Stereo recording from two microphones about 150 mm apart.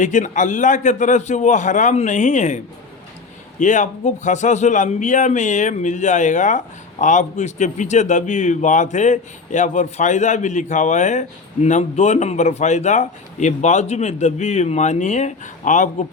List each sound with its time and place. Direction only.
0.0 s a man's voice: 55° left (ahead or behind)
3.6 s a man's voice: 55° left (ahead or behind)